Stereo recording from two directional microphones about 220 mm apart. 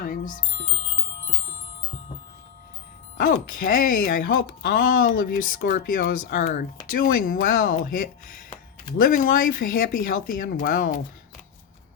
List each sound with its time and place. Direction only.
0.0 s chime: 35° left (ahead or behind)
3.2 s speech: 40° left (ahead or behind)